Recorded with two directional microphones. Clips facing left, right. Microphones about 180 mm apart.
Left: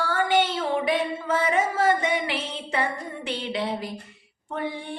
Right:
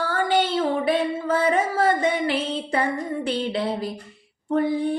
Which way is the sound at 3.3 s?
40° right (ahead or behind).